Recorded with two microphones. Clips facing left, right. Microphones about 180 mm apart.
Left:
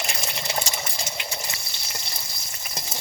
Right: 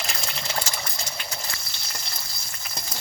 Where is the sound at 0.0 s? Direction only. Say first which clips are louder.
Left 2 dB; 15° left (ahead or behind).